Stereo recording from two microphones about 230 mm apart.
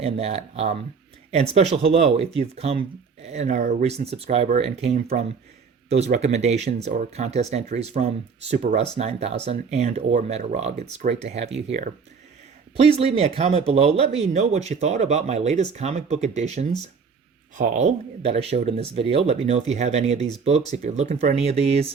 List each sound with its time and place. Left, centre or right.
0.0 s speech: right